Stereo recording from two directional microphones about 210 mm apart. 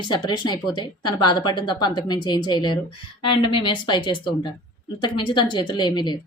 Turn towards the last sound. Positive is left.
turn(degrees=20)  # may be behind; listen again after turning